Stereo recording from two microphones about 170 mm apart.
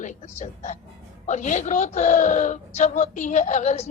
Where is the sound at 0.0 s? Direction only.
45° left (ahead or behind).